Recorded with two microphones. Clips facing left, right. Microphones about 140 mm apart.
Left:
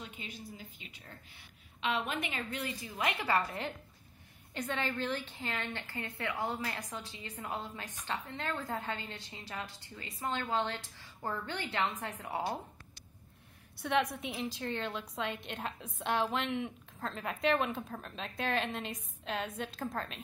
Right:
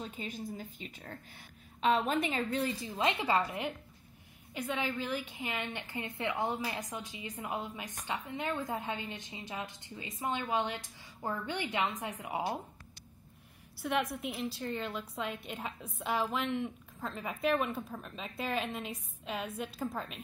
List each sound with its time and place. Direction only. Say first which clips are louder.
0.0 s a woman's voice: right 6 dB; 40° right (ahead or behind); by 12.5 s 15° right (ahead or behind)
13.7 s a woman's voice: left 1 dB; 5° right (ahead or behind)